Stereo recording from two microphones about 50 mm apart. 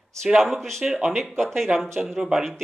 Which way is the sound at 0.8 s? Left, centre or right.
Centre.